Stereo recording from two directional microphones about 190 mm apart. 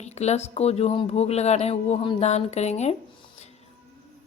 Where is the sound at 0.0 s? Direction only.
35° left (ahead or behind).